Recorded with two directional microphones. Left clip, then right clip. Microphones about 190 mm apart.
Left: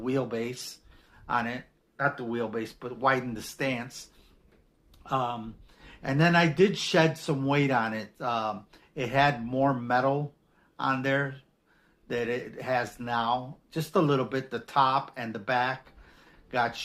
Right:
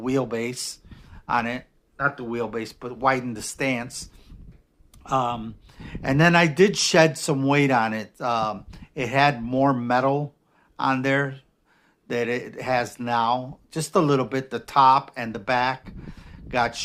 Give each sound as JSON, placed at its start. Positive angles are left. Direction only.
{"t": 0.0, "sound": "speech", "side_deg": -40}